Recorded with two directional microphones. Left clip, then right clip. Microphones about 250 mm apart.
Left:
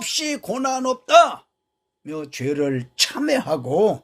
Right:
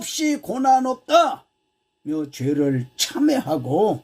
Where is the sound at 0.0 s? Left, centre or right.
Left.